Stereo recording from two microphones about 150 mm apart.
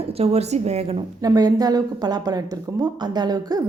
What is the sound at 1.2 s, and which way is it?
A woman's voice, 25° right (ahead or behind).